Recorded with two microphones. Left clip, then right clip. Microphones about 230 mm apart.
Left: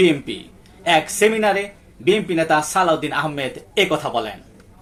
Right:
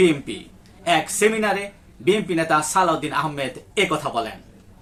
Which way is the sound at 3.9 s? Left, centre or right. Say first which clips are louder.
Left 2 dB; right.